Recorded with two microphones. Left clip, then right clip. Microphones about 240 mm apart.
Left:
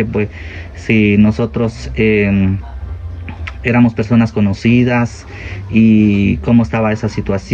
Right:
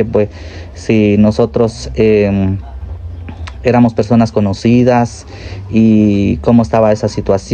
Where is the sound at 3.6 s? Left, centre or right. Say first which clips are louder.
Right 4 dB; centre.